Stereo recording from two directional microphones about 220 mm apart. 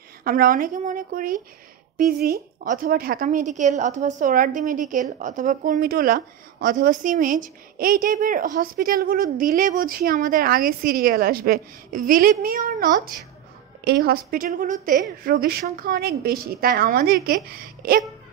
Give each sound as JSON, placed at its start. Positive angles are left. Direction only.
{"t": 0.2, "sound": "a woman's voice", "side_deg": -40}